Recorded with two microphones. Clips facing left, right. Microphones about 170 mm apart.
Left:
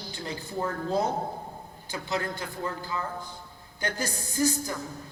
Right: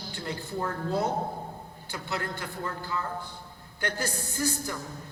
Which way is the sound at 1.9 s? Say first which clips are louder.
Left 3 dB; 15° left (ahead or behind).